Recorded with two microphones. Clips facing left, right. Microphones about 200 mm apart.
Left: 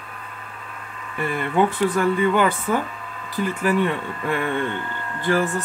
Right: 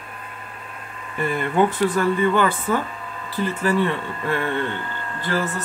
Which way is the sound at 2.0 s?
10° left (ahead or behind).